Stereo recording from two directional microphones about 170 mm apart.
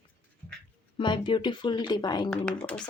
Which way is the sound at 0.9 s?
30° left (ahead or behind).